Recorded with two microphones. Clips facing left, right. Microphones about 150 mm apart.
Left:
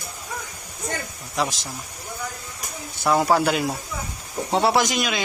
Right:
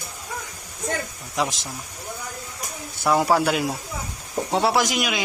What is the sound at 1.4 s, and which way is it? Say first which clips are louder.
Speech: even; 15° right (ahead or behind).